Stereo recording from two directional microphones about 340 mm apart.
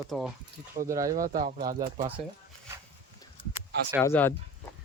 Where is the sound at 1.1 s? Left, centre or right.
Right.